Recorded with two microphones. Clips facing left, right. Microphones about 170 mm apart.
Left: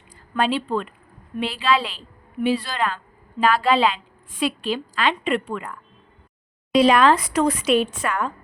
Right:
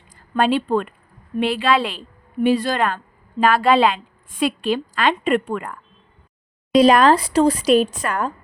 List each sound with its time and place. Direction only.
0.3 s a woman's voice: 50° right (ahead or behind)